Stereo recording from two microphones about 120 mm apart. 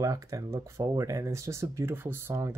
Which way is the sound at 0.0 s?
25° right (ahead or behind).